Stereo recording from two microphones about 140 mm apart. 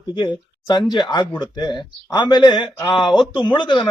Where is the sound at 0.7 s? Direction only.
30° left (ahead or behind).